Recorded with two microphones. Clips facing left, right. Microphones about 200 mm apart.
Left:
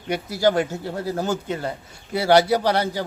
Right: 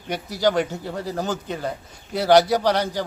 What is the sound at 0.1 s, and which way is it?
Speech, 10° left (ahead or behind).